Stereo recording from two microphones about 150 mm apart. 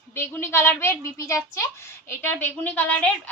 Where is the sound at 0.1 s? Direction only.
15° left (ahead or behind).